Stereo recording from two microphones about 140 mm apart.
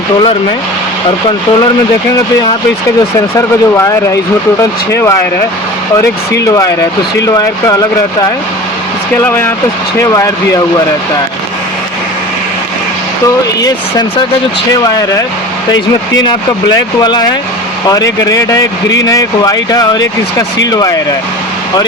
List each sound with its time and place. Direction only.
3.3 s speech: 20° left (ahead or behind)
9.2 s speech: 15° left (ahead or behind)
13.2 s speech: 25° left (ahead or behind)
16.2 s speech: 30° left (ahead or behind)